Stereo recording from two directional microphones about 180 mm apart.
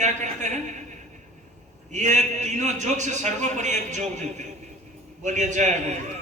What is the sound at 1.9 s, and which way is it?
A man's voice, 40° right (ahead or behind).